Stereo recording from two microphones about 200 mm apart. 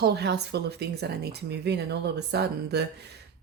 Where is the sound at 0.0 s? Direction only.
55° right (ahead or behind).